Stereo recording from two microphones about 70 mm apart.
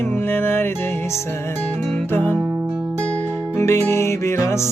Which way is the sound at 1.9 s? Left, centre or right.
Left.